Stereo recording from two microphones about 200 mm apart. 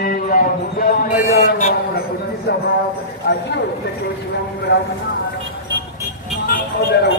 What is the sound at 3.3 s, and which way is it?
Speech, 55° left (ahead or behind).